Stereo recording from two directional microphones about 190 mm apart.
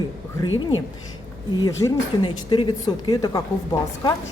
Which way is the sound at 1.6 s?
25° left (ahead or behind).